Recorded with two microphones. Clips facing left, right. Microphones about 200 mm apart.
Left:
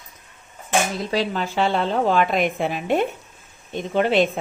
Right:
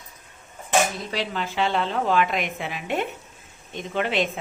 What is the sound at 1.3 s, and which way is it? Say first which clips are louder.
A woman's voice: left 3 dB; 40° left (ahead or behind).